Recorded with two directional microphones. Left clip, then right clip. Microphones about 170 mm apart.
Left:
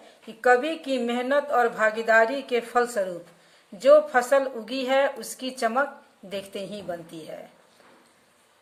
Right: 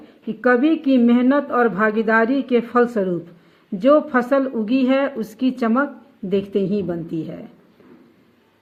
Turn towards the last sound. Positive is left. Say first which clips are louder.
# right 10 dB
turn(degrees=-40)  # may be behind; listen again after turning